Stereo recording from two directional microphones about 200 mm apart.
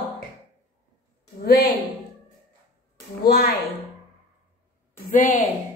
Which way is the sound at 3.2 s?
50° left (ahead or behind).